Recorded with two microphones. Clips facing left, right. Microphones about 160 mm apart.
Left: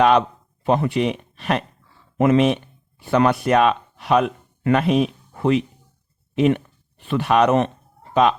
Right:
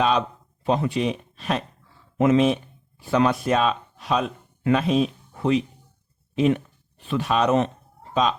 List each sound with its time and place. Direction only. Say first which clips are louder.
0.0 s speech: left 6 dB; 65° left (ahead or behind)